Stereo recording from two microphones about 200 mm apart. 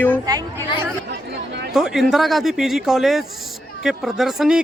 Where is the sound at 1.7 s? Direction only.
Centre (ahead or behind).